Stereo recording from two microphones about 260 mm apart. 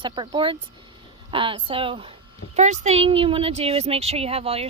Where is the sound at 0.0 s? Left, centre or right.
Centre.